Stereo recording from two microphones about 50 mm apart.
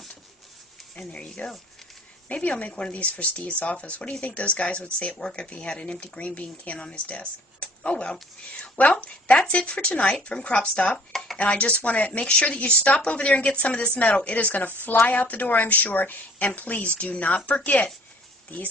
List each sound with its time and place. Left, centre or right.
0.9 s speech: centre; by 18.7 s left